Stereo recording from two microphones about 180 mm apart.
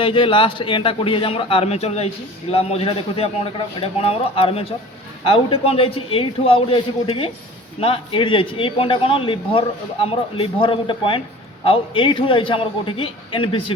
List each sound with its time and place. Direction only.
0.0 s a man's voice: 25° left (ahead or behind)